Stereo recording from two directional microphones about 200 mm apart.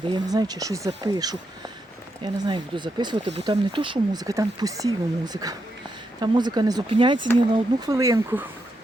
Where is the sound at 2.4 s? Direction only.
20° right (ahead or behind).